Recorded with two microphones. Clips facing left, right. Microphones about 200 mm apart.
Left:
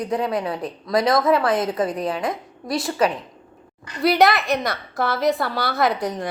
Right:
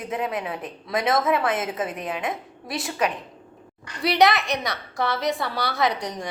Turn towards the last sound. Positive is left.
turn(degrees=5)  # may be behind; listen again after turning